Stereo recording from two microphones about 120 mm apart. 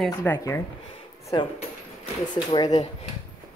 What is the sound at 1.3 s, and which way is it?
Speech, 40° left (ahead or behind).